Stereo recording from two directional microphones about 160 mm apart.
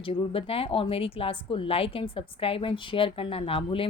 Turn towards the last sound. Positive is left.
turn(degrees=35)  # may be behind; listen again after turning